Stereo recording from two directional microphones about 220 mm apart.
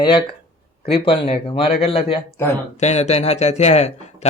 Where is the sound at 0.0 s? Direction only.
20° left (ahead or behind).